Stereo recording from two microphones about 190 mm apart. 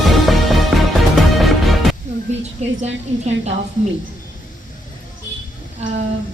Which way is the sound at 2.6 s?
35° right (ahead or behind).